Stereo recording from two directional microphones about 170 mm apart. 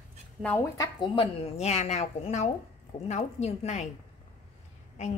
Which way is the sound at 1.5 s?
40° left (ahead or behind).